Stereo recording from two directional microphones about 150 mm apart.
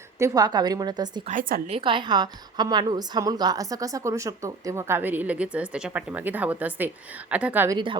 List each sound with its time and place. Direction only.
0.2 s a woman's voice: 25° right (ahead or behind)
1.3 s a woman's voice: 65° right (ahead or behind)
1.7 s a woman's voice: 35° right (ahead or behind); by 7.8 s 15° right (ahead or behind)